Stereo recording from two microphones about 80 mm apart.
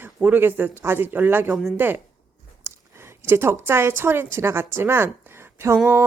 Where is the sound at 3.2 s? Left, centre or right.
Right.